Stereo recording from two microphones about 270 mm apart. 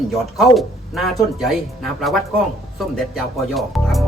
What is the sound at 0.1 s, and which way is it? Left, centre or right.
Speech, centre.